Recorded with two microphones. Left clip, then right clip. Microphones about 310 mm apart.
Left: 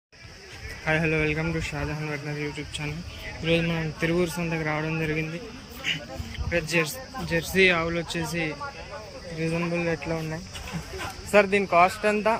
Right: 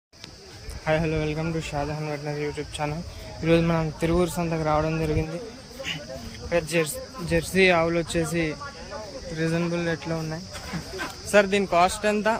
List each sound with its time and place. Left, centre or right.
0.9 s speech: centre